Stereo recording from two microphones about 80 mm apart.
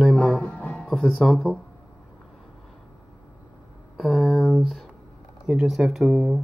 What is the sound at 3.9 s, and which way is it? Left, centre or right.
Speech, centre.